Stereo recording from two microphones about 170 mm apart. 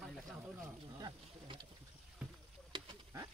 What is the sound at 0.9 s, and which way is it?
Speech, 30° right (ahead or behind).